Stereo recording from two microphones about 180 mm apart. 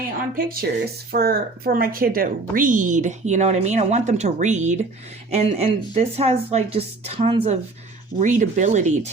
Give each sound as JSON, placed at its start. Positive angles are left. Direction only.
{"t": 0.3, "sound": "speech", "side_deg": -55}
{"t": 8.2, "sound": "speech", "side_deg": -45}